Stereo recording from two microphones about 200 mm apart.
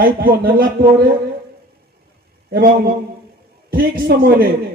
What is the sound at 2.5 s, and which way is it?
A man's voice, 50° right (ahead or behind).